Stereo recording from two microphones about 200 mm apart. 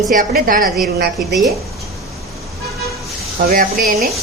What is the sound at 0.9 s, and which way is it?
Speech, 55° right (ahead or behind).